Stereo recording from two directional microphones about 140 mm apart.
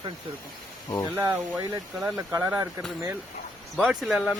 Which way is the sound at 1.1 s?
20° right (ahead or behind).